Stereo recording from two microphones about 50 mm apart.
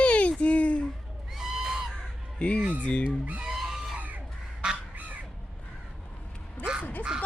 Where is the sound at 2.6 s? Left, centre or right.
Right.